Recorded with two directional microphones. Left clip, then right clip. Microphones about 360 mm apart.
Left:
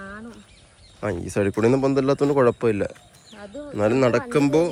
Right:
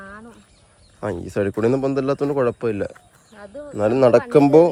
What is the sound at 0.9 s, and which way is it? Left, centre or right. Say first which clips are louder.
Speech: right 1 dB; centre.